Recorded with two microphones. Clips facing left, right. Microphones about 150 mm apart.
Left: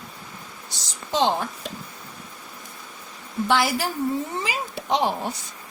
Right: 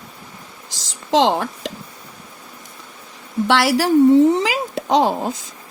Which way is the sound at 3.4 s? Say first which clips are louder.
Right 6 dB; 85° right.